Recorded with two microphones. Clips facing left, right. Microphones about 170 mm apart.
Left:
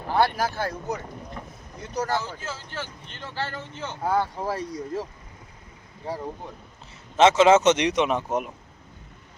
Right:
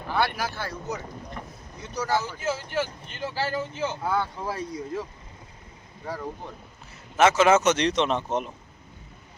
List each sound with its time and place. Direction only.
0.3 s speech: 45° left (ahead or behind)
2.4 s speech: 15° right (ahead or behind)
4.0 s speech: 35° left (ahead or behind)
7.2 s speech: 20° left (ahead or behind)